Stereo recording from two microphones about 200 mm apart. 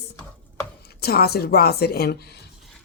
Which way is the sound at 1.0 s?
50° left (ahead or behind).